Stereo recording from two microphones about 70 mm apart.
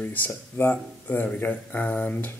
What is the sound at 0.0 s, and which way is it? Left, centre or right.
Speech, left.